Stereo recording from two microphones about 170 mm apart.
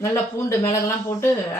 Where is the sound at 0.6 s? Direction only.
20° left (ahead or behind).